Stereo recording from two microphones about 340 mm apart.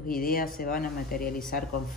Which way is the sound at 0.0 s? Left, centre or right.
Left.